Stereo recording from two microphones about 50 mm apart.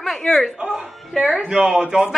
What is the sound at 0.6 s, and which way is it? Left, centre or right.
A man's voice, centre.